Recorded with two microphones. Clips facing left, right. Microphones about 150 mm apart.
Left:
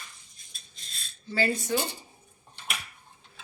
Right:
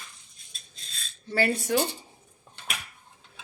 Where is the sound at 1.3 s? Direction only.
65° right (ahead or behind).